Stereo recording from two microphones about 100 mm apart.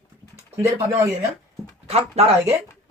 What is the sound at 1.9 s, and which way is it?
Speech, 90° right.